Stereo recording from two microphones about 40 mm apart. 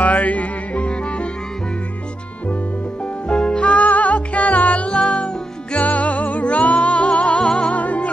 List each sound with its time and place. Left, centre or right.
0.0 s music: left
3.3 s music: left
7.7 s music: left